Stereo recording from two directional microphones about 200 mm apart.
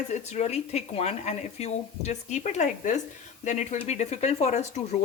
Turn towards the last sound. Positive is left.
turn(degrees=35)  # may be behind; listen again after turning